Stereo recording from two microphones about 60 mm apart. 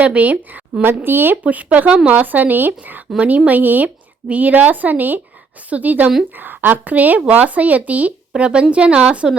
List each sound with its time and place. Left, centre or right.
0.0 s a woman's voice: right